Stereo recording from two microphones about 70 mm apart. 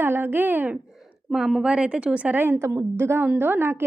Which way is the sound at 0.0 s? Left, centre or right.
Right.